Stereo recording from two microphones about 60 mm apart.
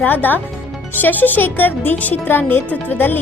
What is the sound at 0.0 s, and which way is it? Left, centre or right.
Speech, left.